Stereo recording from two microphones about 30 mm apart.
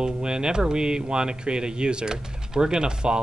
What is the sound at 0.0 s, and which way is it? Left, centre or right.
Speech, right.